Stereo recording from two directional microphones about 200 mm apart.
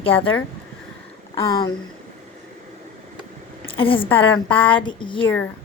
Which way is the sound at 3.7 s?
25° left (ahead or behind).